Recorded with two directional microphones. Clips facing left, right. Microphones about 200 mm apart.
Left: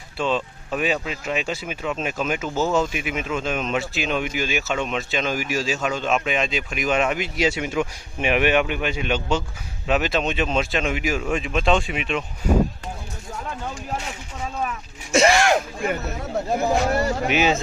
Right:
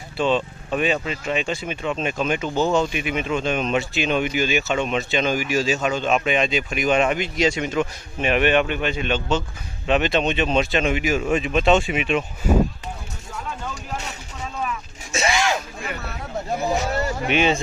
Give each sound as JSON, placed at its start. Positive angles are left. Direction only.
{"t": 0.2, "sound": "speech", "side_deg": 0}
{"t": 15.1, "sound": "a sound", "side_deg": 55}
{"t": 17.2, "sound": "speech", "side_deg": 5}